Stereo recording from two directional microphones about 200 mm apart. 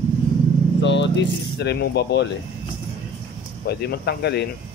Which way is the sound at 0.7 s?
60° left (ahead or behind).